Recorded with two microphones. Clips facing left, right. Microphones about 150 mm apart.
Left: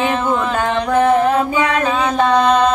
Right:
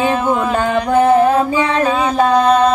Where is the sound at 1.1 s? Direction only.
30° right (ahead or behind).